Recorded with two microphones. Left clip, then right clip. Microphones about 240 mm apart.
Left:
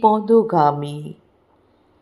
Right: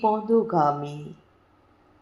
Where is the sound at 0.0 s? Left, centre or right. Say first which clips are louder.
Left 7 dB; left.